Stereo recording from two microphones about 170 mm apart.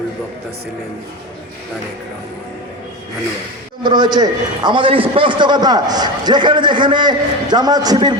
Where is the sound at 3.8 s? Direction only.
25° right (ahead or behind).